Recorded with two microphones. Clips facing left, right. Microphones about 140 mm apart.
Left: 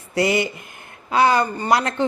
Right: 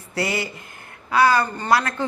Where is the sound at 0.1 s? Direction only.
20° left (ahead or behind).